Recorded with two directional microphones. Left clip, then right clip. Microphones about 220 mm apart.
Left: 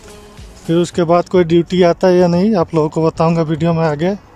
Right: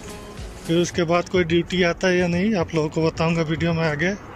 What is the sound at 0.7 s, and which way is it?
Speech, 15° left (ahead or behind).